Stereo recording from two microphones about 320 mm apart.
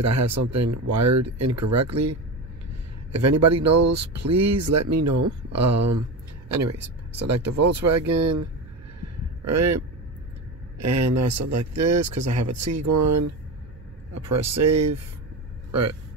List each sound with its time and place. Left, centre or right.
0.0 s speech: right
7.2 s speech: right